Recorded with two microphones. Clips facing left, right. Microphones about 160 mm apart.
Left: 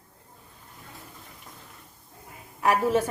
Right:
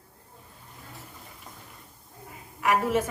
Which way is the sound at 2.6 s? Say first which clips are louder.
Left 2 dB; 30° left (ahead or behind).